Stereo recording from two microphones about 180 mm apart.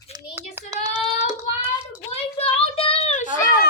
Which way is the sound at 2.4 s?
30° left (ahead or behind).